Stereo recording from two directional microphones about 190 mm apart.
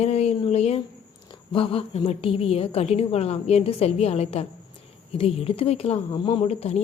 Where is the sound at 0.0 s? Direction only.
35° left (ahead or behind).